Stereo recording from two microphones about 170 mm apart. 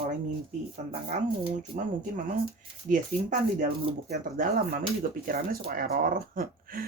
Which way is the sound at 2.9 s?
50° right (ahead or behind).